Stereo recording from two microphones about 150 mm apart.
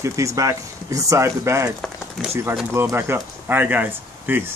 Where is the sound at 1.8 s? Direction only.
Centre (ahead or behind).